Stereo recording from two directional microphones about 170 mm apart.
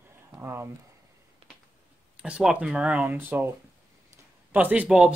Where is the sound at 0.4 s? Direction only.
15° right (ahead or behind).